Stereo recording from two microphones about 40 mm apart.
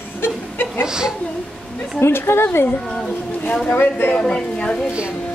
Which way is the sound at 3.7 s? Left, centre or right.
Left.